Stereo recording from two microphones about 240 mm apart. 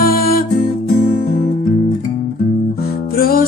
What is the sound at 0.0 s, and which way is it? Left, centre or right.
Music, left.